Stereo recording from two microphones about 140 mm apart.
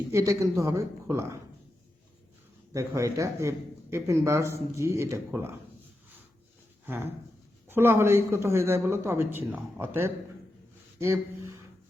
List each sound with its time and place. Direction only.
0.1 s a man's voice: 20° right (ahead or behind)
2.7 s a man's voice: 20° right (ahead or behind)
6.8 s a man's voice: 15° right (ahead or behind)
11.0 s a sound: 20° right (ahead or behind)